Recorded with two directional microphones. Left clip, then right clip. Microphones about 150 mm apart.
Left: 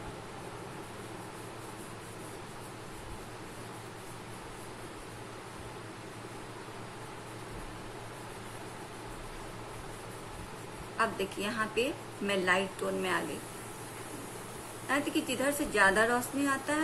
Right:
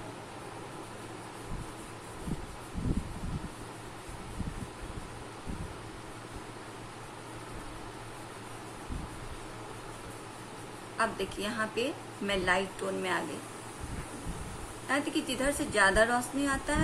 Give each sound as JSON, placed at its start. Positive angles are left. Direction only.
{"t": 11.0, "sound": "a woman's voice", "side_deg": 5}
{"t": 14.9, "sound": "a woman's voice", "side_deg": 5}